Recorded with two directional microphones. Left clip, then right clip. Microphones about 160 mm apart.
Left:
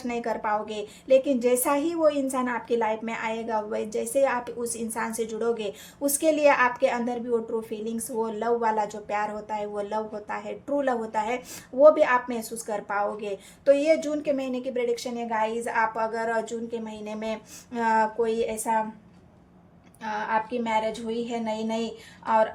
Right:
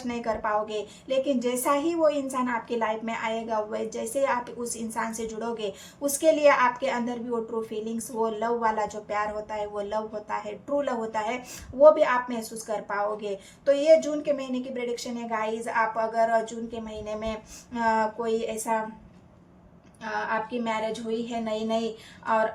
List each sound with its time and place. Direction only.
0.1 s a woman's voice: 40° left (ahead or behind)
20.0 s a woman's voice: 40° left (ahead or behind)